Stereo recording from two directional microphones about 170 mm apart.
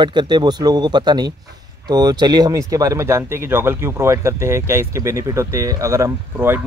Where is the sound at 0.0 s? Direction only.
25° right (ahead or behind).